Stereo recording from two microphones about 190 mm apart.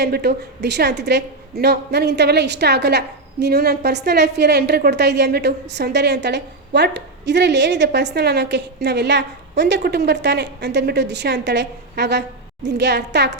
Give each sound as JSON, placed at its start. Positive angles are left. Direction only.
{"t": 0.0, "sound": "a woman's voice", "side_deg": -60}